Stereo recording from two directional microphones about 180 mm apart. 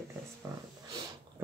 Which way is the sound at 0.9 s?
20° right (ahead or behind).